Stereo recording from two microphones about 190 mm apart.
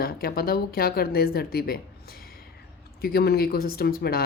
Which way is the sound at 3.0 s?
55° left (ahead or behind).